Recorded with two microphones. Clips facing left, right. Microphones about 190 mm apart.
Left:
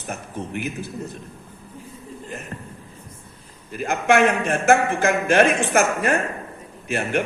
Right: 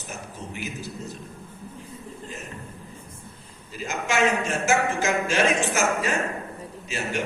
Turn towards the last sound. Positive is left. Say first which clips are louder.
# left 6 dB
turn(degrees=55)  # may be behind; listen again after turning